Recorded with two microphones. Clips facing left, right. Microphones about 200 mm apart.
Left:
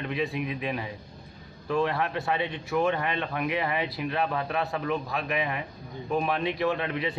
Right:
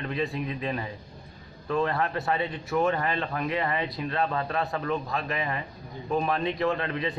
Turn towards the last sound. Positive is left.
turn(degrees=5)  # may be behind; listen again after turning